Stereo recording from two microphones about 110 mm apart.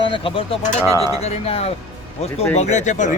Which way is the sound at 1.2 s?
70° left (ahead or behind).